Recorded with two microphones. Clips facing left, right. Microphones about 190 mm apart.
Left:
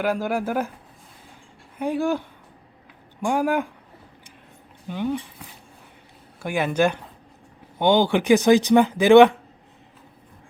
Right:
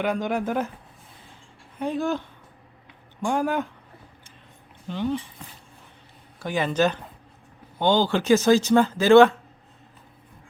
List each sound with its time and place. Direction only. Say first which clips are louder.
0.0 s speech: left 1 dB; 5° left (ahead or behind)
1.8 s speech: left 2 dB; 10° left (ahead or behind)
4.9 s speech: left 1 dB; 10° left (ahead or behind)